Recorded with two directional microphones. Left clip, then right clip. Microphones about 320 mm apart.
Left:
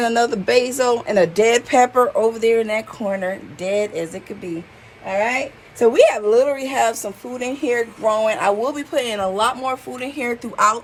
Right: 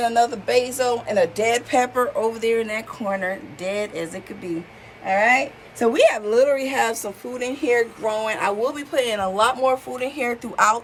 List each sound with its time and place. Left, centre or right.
0.0 s a woman's voice: left; by 10.8 s centre